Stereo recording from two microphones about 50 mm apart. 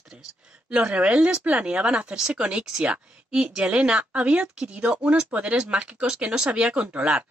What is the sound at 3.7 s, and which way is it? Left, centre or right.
Speech, right.